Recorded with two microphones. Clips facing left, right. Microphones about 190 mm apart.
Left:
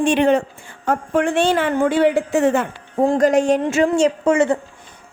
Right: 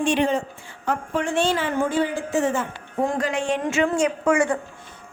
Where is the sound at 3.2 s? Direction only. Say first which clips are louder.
Left 9 dB; 40° left (ahead or behind); by 4.5 s 25° left (ahead or behind).